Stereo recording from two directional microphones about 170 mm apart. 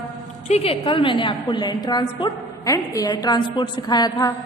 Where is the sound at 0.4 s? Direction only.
35° left (ahead or behind).